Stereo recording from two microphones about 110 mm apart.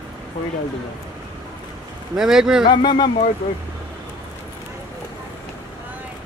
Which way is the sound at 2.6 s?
45° left (ahead or behind).